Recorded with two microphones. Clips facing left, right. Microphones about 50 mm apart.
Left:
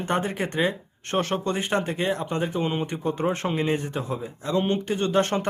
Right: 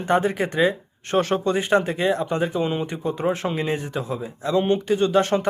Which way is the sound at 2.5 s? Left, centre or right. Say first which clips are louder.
Right 2 dB; left.